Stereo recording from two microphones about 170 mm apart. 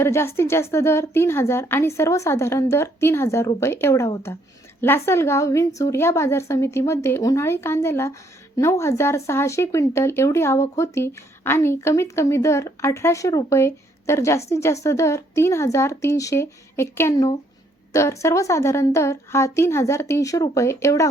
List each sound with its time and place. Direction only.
0.0 s speech: 15° left (ahead or behind)